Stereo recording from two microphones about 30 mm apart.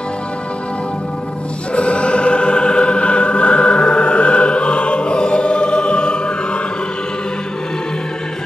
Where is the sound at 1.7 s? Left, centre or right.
Left.